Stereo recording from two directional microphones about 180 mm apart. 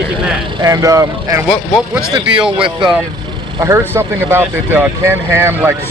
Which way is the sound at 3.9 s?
10° right (ahead or behind).